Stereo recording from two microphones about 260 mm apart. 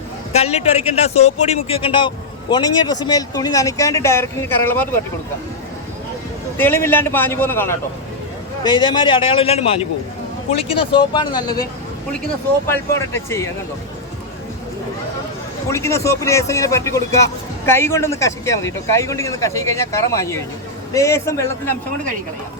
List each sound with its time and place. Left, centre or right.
0.3 s a man's voice: left; by 4.9 s centre
6.6 s a man's voice: centre
15.7 s a man's voice: centre